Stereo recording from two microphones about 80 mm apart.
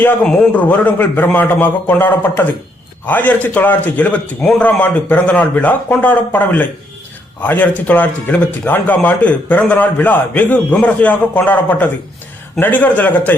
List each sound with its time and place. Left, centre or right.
0.5 s a man's voice: left